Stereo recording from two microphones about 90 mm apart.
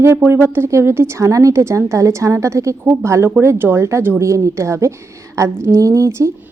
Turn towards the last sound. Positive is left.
turn(degrees=-30)  # may be behind; listen again after turning